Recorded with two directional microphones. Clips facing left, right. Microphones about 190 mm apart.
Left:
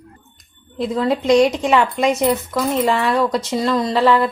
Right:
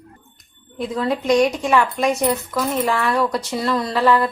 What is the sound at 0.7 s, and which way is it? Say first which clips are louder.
A woman's voice: left 3 dB; 25° left (ahead or behind).